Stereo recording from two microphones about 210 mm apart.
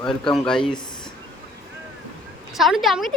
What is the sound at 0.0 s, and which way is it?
Speech, centre (ahead or behind).